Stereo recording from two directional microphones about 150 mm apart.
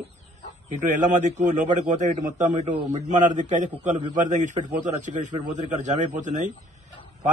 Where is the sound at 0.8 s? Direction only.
55° right (ahead or behind).